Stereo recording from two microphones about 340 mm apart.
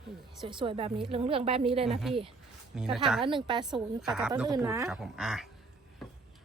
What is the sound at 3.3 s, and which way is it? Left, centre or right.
Speech, centre.